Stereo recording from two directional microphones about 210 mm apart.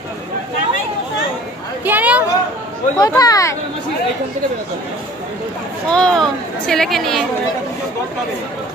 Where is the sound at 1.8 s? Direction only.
10° right (ahead or behind).